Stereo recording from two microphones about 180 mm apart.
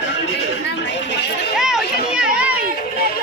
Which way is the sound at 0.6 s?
75° left (ahead or behind).